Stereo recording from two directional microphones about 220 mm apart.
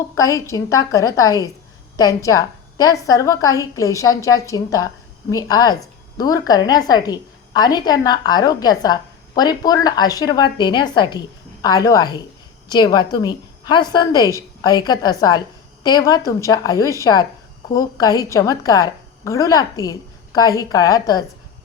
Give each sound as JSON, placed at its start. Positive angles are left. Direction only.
{"t": 0.2, "sound": "a woman's voice", "side_deg": 15}